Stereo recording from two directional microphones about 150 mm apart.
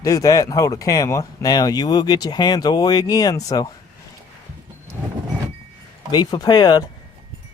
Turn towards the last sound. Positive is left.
turn(degrees=25)  # may be behind; listen again after turning